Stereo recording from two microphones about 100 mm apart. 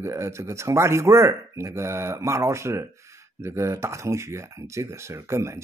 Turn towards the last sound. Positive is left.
turn(degrees=-30)  # may be behind; listen again after turning